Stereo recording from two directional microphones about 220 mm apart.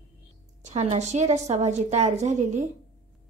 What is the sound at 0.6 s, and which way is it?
A woman's voice, 30° right (ahead or behind).